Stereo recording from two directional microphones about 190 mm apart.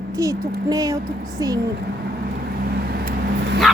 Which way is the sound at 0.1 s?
15° right (ahead or behind).